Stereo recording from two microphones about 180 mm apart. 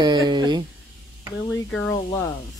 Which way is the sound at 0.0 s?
25° right (ahead or behind).